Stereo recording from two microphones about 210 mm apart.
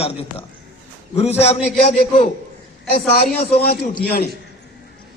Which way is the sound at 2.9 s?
45° left (ahead or behind).